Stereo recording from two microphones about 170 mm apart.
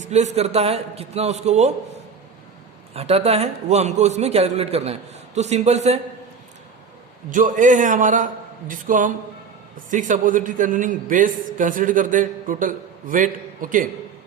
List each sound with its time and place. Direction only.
0.0 s a man's voice: 40° right (ahead or behind)
7.3 s a man's voice: 50° right (ahead or behind)